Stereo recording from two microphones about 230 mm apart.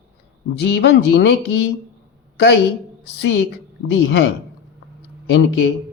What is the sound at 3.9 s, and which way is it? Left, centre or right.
Speech, left.